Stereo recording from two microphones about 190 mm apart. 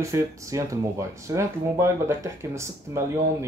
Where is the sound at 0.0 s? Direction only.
15° right (ahead or behind).